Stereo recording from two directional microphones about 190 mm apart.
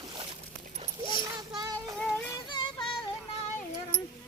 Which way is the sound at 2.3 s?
25° left (ahead or behind).